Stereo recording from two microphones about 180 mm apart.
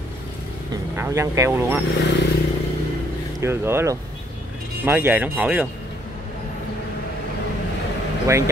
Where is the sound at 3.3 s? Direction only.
15° right (ahead or behind).